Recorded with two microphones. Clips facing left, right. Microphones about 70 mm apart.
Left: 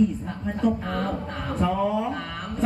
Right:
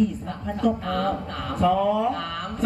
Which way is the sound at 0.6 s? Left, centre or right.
Left.